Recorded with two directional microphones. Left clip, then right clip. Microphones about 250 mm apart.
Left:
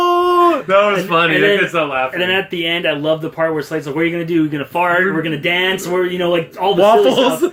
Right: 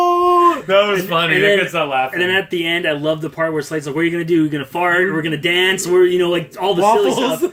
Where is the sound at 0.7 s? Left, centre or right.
Right.